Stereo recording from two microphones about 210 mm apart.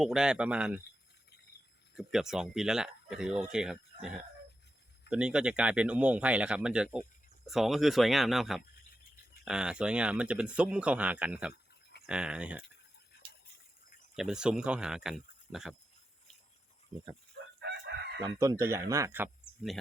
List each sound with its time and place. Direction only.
0.0 s speech: centre (ahead or behind)
2.0 s speech: centre (ahead or behind)
5.0 s speech: 5° right (ahead or behind)
14.2 s speech: 5° right (ahead or behind)
17.6 s chicken: 55° right (ahead or behind)
18.2 s speech: 15° right (ahead or behind)